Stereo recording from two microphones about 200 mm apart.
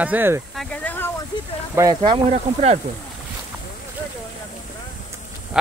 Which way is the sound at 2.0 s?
25° right (ahead or behind).